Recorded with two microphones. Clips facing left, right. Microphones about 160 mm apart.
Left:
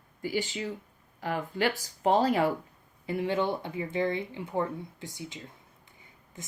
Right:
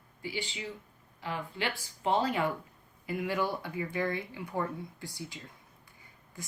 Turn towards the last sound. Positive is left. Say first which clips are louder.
# even
turn(degrees=20)  # may be behind; listen again after turning